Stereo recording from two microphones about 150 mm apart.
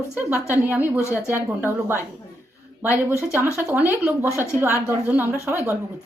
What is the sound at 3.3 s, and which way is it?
A woman's voice, 15° right (ahead or behind).